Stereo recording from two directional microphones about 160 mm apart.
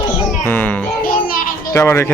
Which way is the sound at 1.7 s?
15° left (ahead or behind).